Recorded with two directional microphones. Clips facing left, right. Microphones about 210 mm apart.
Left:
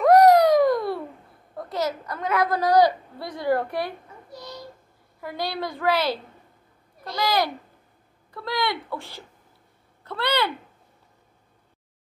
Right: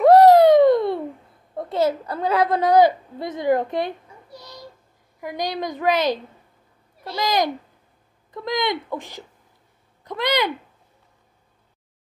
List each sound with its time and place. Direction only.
0.0 s a sound: 30° right (ahead or behind)
1.6 s a woman's voice: 25° right (ahead or behind)
5.2 s a woman's voice: 15° right (ahead or behind)
7.2 s a woman's voice: 20° right (ahead or behind)